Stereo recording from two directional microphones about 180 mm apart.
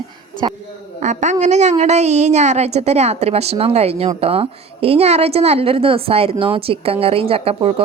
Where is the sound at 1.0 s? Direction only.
40° right (ahead or behind).